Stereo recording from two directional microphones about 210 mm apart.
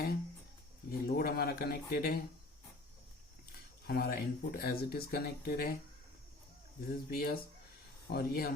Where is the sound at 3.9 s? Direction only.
45° left (ahead or behind).